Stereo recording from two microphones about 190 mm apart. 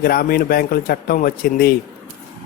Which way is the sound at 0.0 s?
50° left (ahead or behind).